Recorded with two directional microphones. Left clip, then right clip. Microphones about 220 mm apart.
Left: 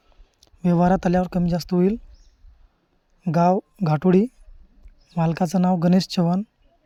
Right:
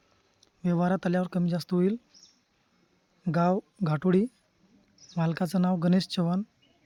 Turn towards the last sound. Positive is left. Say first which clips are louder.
# left 7 dB
turn(degrees=25)  # may be behind; listen again after turning